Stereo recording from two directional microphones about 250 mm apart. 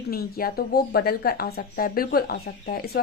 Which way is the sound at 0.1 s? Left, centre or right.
Left.